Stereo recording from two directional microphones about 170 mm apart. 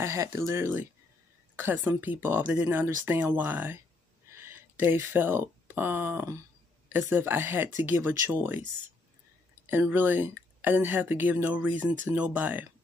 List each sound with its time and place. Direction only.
0.0 s speech: 15° right (ahead or behind)
9.7 s speech: 10° right (ahead or behind)